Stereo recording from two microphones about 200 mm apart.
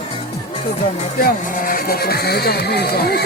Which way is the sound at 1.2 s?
45° left (ahead or behind).